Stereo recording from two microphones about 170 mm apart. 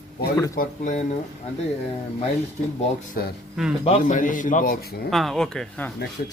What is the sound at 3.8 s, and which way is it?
Speech, 35° left (ahead or behind).